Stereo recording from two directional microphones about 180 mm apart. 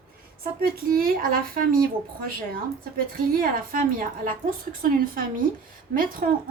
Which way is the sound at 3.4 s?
50° right (ahead or behind).